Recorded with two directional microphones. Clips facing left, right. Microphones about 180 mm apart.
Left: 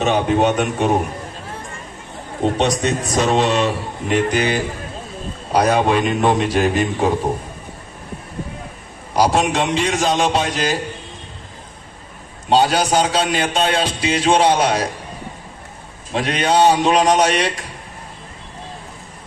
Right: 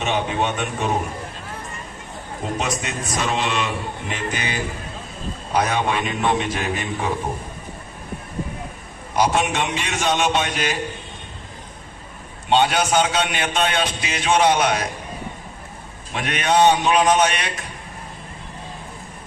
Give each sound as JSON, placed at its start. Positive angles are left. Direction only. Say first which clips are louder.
{"t": 0.0, "sound": "a man's voice", "louder": "left 6 dB", "side_deg": 40}
{"t": 2.4, "sound": "a man's voice", "louder": "left 8 dB", "side_deg": 35}
{"t": 5.5, "sound": "a man's voice", "louder": "left 6 dB", "side_deg": 35}
{"t": 9.1, "sound": "a man's voice", "louder": "left 3 dB", "side_deg": 35}
{"t": 12.5, "sound": "a man's voice", "louder": "left 3 dB", "side_deg": 35}
{"t": 16.1, "sound": "a man's voice", "louder": "left 3 dB", "side_deg": 30}